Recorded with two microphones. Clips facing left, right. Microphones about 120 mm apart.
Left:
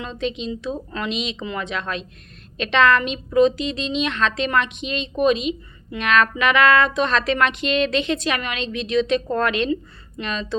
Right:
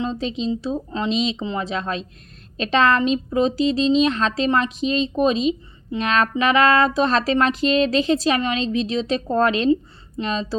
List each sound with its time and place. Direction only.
0.0 s a woman's voice: 35° right (ahead or behind)